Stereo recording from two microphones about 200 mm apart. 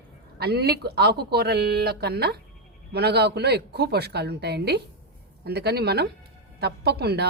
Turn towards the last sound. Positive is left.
turn(degrees=-55)  # may be behind; listen again after turning